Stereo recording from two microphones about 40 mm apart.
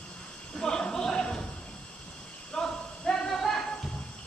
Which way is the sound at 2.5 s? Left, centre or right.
Centre.